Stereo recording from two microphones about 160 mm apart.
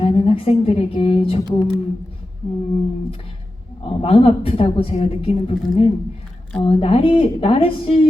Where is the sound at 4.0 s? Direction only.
35° left (ahead or behind).